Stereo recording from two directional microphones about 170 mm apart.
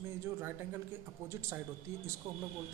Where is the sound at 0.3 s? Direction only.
15° right (ahead or behind).